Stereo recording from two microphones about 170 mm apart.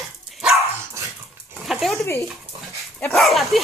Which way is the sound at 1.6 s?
Centre (ahead or behind).